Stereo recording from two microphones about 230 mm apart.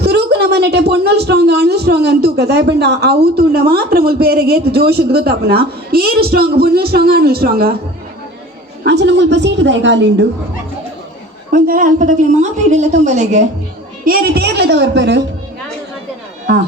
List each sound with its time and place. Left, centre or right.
0.0 s a woman's voice: right
8.8 s a woman's voice: right
11.5 s a woman's voice: right